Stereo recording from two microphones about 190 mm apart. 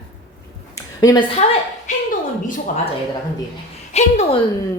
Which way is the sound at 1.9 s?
40° left (ahead or behind).